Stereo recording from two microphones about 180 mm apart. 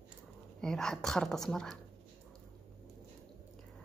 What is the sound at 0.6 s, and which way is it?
Speech, 5° left (ahead or behind).